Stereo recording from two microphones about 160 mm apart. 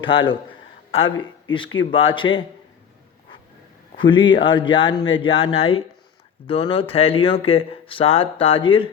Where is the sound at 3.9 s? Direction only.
30° left (ahead or behind).